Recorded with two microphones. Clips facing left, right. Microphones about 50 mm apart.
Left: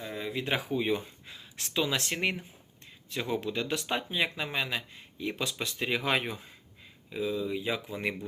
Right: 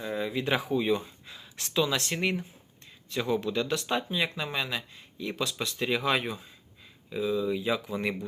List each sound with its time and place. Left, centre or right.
0.0 s speech: centre
1.3 s a sound: centre
2.0 s speech: centre
3.2 s a man's voice: centre
7.1 s speech: centre